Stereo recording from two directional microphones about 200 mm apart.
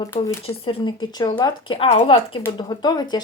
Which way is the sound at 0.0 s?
15° left (ahead or behind).